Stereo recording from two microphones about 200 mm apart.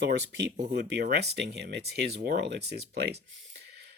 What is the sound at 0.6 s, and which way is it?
Speech, 55° right (ahead or behind).